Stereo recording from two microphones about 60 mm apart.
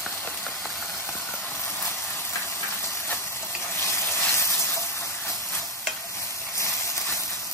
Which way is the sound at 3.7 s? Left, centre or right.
Left.